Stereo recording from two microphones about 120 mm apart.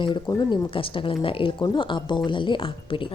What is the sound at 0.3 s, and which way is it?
Speech, 35° left (ahead or behind).